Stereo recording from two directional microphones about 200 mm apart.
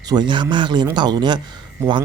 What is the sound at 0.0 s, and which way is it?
Speech, 20° right (ahead or behind).